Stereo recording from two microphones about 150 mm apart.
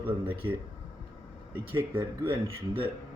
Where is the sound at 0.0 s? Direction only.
35° right (ahead or behind).